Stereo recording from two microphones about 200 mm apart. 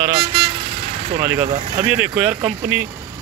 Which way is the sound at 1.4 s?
40° right (ahead or behind).